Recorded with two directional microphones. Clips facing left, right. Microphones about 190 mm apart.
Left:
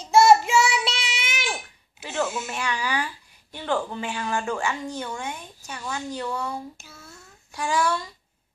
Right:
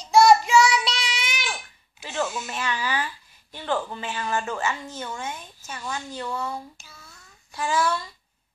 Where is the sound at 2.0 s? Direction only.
5° left (ahead or behind).